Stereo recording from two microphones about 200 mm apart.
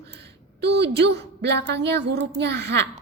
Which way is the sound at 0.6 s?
55° right (ahead or behind).